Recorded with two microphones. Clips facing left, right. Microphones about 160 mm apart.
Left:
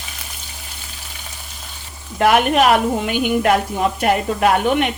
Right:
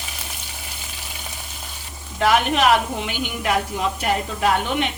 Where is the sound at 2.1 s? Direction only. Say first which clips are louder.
Left 4 dB; 55° left (ahead or behind).